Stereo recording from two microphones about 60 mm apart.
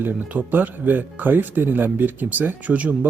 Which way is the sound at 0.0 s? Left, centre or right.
Right.